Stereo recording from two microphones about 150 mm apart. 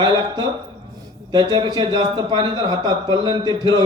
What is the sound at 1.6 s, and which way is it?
A man's voice, 25° right (ahead or behind).